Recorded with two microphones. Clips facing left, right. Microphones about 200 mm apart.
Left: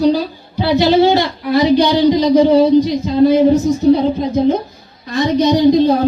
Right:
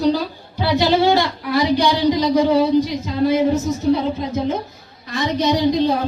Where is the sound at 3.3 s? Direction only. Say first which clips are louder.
Left 3 dB; 30° left (ahead or behind).